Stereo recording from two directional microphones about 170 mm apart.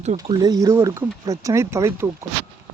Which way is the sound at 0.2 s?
25° right (ahead or behind).